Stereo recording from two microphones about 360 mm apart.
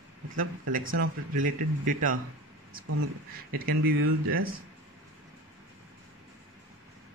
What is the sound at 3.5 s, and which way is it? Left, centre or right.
Speech, right.